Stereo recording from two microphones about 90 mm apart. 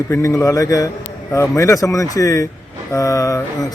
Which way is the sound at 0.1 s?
35° left (ahead or behind).